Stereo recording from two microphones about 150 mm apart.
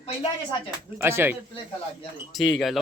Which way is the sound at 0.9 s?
15° right (ahead or behind).